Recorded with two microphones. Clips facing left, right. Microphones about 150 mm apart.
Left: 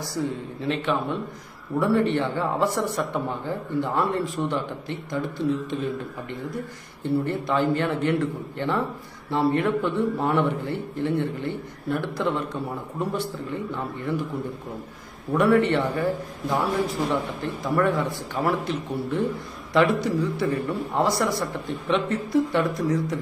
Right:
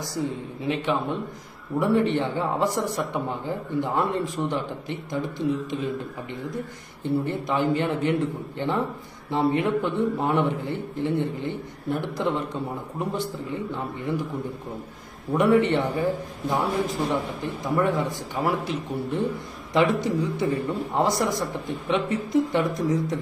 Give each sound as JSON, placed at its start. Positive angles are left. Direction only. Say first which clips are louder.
{"t": 0.0, "sound": "a man's voice", "louder": "left 1 dB", "side_deg": -15}
{"t": 7.0, "sound": "a man's voice", "louder": "left 1 dB", "side_deg": -15}
{"t": 15.3, "sound": "a man's voice", "louder": "even", "side_deg": -15}